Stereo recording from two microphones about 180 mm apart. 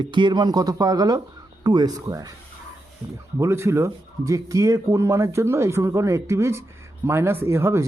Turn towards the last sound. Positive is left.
turn(degrees=-15)  # may be behind; listen again after turning